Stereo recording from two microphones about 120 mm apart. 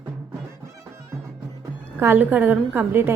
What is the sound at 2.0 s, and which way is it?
A woman's voice, 15° right (ahead or behind).